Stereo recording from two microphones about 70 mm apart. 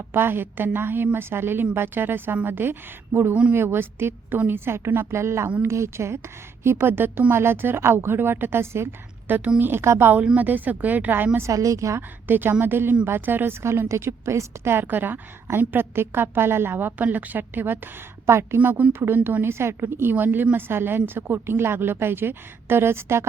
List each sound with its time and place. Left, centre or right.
0.1 s speech: right
10.3 s speech: right
11.5 s a woman's voice: right
12.3 s speech: right